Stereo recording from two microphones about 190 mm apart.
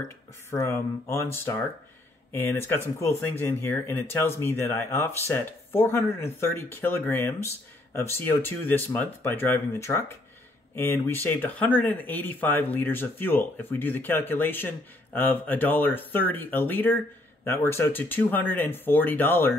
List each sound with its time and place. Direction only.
0.5 s speech: 15° left (ahead or behind)